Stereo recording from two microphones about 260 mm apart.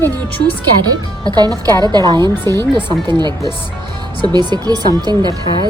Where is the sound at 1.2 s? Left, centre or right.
Centre.